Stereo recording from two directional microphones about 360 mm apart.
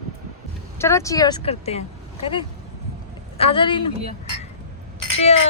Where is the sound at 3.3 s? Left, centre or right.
Centre.